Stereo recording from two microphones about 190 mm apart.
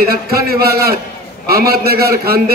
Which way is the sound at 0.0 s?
55° right (ahead or behind).